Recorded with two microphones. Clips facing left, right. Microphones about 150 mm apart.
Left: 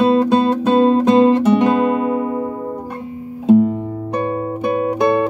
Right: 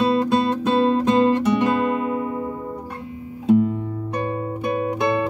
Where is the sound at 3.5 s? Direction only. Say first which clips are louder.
Left 5 dB; 30° left (ahead or behind).